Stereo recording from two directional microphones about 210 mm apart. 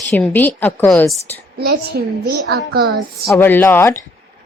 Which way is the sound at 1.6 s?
45° right (ahead or behind).